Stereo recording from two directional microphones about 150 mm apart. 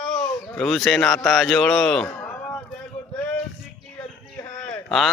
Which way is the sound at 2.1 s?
15° left (ahead or behind).